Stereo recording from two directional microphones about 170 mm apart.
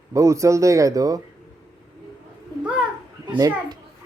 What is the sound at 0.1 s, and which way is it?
Speech, 20° right (ahead or behind).